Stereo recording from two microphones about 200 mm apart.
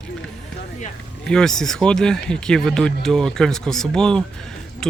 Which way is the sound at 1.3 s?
5° left (ahead or behind).